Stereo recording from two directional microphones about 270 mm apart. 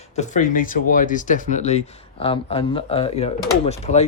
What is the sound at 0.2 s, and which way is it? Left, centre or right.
Speech, left.